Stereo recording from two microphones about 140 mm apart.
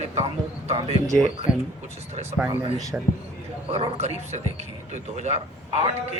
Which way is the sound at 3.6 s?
45° right (ahead or behind).